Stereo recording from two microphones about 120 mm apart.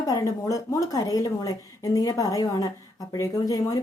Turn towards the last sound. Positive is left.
turn(degrees=30)  # may be behind; listen again after turning